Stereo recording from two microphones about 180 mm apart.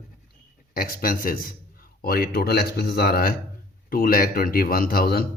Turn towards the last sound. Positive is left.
turn(degrees=55)  # may be behind; listen again after turning